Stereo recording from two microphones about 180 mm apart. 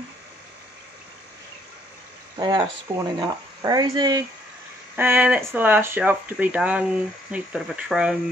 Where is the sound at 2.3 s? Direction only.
25° right (ahead or behind).